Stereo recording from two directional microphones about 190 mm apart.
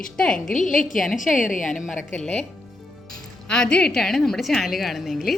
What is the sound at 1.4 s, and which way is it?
Speech, 45° left (ahead or behind).